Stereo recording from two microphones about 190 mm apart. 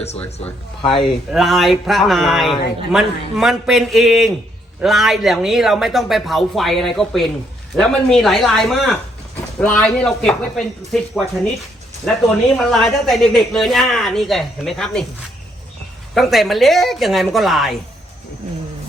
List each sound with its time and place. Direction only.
0.8 s speech: 30° left (ahead or behind)
1.3 s speech: centre (ahead or behind)
12.5 s speech: centre (ahead or behind)
16.1 s speech: centre (ahead or behind)